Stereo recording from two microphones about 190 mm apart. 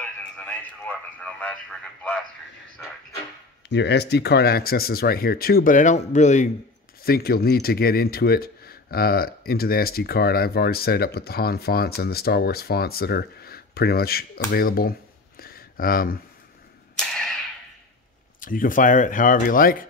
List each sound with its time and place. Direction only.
0.0 s speech: 5° left (ahead or behind)
3.6 s speech: 65° left (ahead or behind); by 6.5 s 40° left (ahead or behind)
7.0 s speech: 55° left (ahead or behind)
17.1 s arrow: centre (ahead or behind)
18.4 s speech: 45° left (ahead or behind)